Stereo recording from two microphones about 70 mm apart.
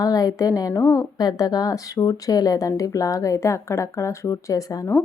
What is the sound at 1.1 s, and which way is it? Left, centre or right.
A woman's voice, left.